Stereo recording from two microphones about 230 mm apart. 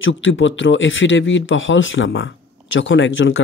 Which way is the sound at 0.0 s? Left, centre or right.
Left.